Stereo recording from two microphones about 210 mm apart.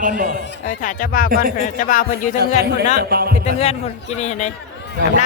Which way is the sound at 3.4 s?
30° left (ahead or behind).